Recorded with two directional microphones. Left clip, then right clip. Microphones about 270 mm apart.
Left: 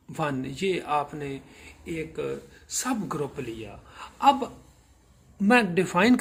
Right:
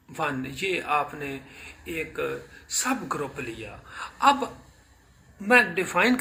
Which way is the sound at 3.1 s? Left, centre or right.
Left.